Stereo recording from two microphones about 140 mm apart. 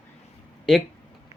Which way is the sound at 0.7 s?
Centre (ahead or behind).